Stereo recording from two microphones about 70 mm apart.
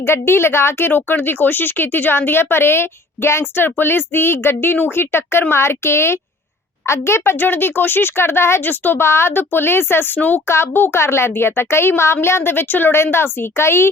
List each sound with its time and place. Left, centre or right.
0.0 s a woman's voice: left